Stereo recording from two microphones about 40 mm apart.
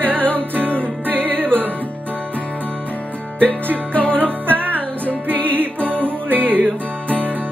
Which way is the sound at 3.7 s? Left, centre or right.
Right.